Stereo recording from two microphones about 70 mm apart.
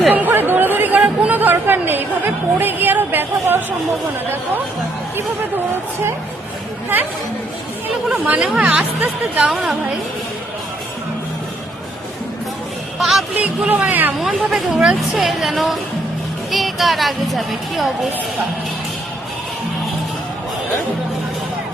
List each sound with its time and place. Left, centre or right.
0.1 s chatter: right
8.2 s speech: right
13.0 s music: centre
13.4 s speech: centre
14.2 s speech: centre